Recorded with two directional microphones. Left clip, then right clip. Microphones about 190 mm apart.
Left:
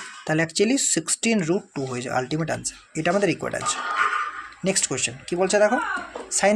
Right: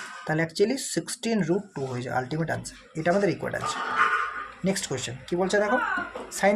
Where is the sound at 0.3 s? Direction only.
35° left (ahead or behind).